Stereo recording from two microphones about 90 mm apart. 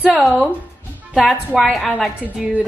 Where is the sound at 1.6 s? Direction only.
Centre (ahead or behind).